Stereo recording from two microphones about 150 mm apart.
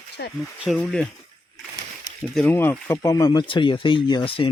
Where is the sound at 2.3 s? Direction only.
10° left (ahead or behind); by 4.5 s 35° left (ahead or behind).